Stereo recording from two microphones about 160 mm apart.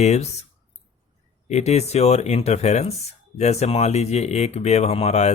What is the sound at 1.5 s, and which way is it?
Speech, 45° left (ahead or behind).